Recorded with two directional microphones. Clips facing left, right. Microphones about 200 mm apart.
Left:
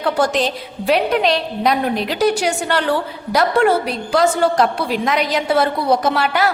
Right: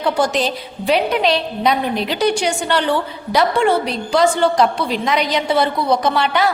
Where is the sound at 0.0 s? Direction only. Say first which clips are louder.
Even; centre (ahead or behind).